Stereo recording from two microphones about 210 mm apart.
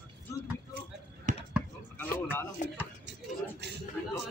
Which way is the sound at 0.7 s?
35° right (ahead or behind).